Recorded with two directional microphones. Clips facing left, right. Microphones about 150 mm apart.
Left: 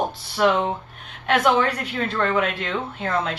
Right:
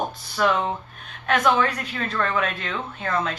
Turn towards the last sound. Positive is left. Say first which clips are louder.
# left 1 dB
turn(degrees=25)  # may be behind; listen again after turning